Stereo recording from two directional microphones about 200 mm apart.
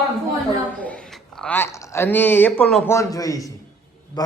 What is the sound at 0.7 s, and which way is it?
A man's voice, 5° left (ahead or behind).